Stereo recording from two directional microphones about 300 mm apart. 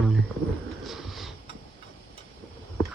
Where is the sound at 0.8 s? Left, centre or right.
Centre.